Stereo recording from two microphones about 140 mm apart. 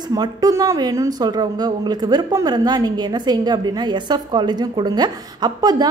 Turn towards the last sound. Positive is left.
turn(degrees=-30)  # may be behind; listen again after turning